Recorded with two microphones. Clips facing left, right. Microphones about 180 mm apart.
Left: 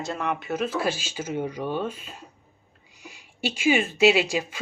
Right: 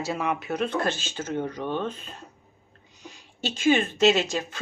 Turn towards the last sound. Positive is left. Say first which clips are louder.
# left 1 dB
turn(degrees=10)  # may be behind; listen again after turning